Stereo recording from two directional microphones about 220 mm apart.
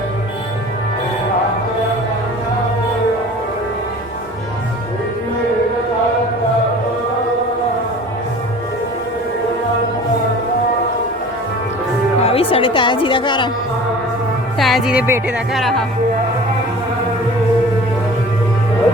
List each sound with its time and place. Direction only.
12.2 s a woman's voice: 25° left (ahead or behind)
14.6 s speech: centre (ahead or behind)